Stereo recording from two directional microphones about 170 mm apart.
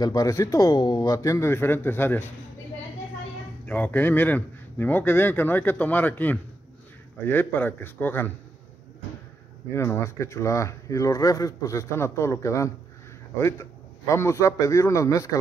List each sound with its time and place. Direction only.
0.0 s a man's voice: 20° left (ahead or behind)
3.6 s speech: 10° left (ahead or behind)
9.7 s speech: 15° left (ahead or behind)